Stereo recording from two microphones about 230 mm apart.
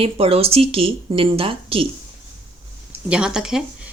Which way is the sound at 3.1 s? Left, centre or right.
Centre.